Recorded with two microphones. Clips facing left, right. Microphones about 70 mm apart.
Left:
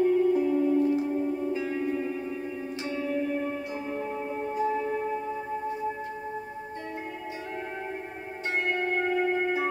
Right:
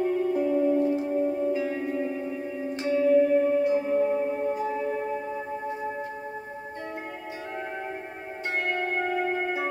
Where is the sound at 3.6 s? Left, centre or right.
Right.